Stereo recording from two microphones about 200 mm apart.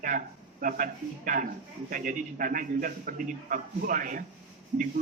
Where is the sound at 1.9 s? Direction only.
45° right (ahead or behind).